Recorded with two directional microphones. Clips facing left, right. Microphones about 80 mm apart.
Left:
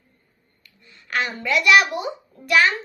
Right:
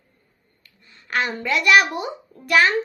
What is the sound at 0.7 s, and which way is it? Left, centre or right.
A child's voice, right.